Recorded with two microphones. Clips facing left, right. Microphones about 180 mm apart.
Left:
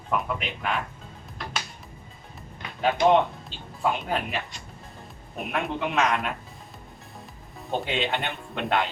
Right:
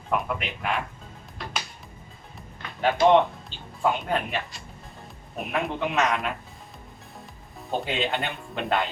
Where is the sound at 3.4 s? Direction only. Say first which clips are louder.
Right 1 dB; centre (ahead or behind).